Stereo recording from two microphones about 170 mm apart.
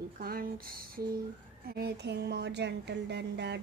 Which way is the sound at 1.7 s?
70° right (ahead or behind).